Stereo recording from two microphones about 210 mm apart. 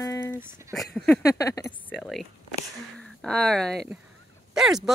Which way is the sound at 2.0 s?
Centre (ahead or behind).